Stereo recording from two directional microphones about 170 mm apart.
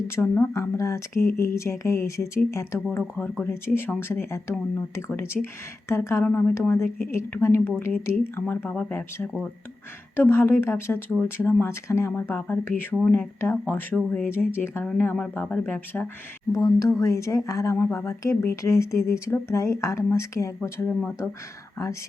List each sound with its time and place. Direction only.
0.2 s speech: 15° left (ahead or behind)